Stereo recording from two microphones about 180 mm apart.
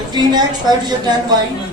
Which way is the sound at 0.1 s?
25° right (ahead or behind).